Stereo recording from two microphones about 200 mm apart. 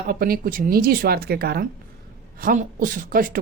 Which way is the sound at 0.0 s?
45° right (ahead or behind).